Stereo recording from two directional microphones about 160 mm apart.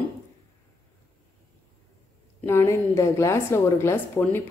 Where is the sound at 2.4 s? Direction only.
15° left (ahead or behind).